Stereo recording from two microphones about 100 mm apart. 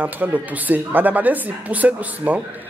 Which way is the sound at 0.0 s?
15° right (ahead or behind).